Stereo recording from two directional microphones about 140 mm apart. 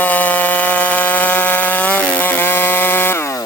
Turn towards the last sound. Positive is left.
turn(degrees=15)  # may be behind; listen again after turning